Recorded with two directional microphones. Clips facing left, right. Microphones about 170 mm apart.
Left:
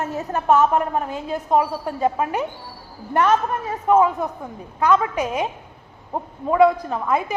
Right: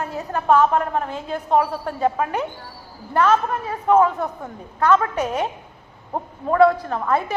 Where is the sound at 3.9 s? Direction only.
5° left (ahead or behind).